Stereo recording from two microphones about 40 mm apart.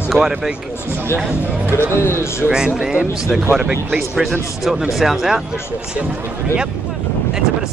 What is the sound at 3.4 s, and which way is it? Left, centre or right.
Speech, right.